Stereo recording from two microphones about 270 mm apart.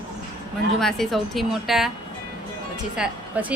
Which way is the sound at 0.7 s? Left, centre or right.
Centre.